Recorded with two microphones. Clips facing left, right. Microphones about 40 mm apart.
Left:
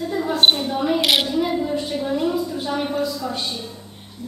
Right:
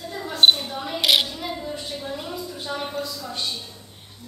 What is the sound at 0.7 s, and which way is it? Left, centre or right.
Mechanisms, centre.